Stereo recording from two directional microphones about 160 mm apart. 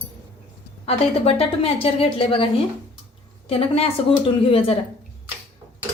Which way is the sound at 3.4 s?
40° left (ahead or behind).